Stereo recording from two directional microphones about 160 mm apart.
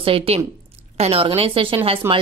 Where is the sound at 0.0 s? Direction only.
35° right (ahead or behind).